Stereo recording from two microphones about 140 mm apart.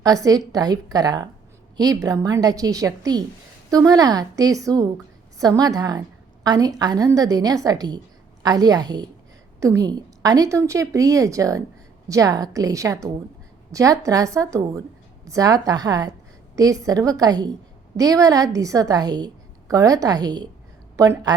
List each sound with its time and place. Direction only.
0.0 s a woman's voice: 25° right (ahead or behind)